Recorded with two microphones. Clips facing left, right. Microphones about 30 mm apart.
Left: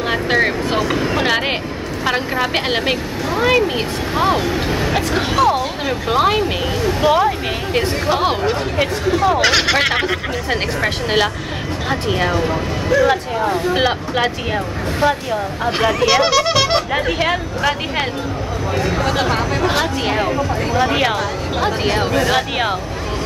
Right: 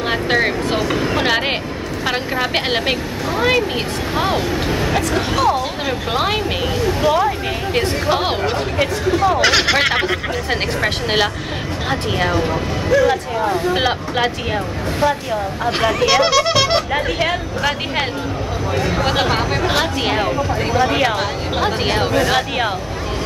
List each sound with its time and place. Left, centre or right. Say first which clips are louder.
0.0 s a sound: left 1 dB; centre
2.0 s speech: left 2 dB; centre
5.6 s speech: left 1 dB; centre
7.7 s speech: even; centre
8.7 s speech: even; centre
19.0 s speech: even; centre
20.2 s speech: even; centre
21.5 s speech: even; centre